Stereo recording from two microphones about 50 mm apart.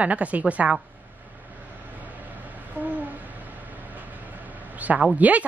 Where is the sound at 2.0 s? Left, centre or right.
Right.